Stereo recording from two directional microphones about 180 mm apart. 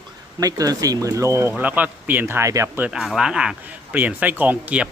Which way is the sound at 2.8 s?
Centre (ahead or behind).